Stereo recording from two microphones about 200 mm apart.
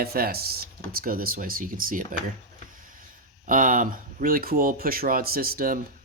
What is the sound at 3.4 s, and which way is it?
Speech, 40° right (ahead or behind).